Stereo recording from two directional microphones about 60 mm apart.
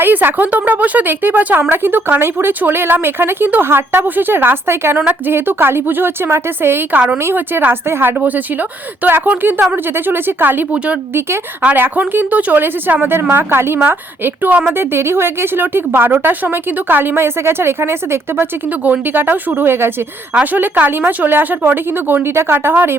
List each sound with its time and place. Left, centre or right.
0.0 s speech: right
11.6 s a woman's voice: right
20.4 s speech: right